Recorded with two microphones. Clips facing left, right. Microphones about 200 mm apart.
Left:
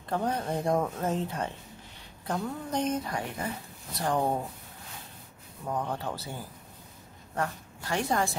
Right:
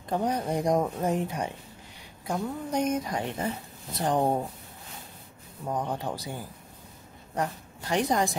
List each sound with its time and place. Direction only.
0.1 s speech: 15° right (ahead or behind)
5.7 s speech: 15° right (ahead or behind)
7.3 s a woman's voice: 20° right (ahead or behind)